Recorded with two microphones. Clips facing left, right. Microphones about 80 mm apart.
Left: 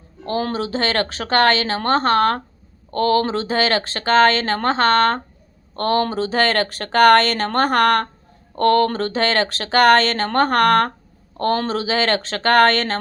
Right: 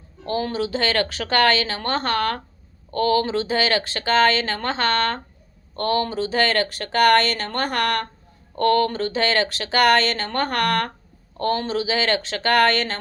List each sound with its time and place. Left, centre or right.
0.5 s speech: left